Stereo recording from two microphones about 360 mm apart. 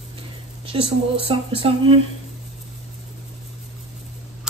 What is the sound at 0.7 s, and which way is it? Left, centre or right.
Speech, centre.